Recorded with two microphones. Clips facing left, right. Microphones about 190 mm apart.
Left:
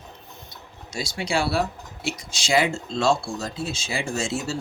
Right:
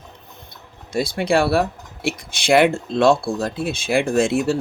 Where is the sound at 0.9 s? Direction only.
55° right (ahead or behind).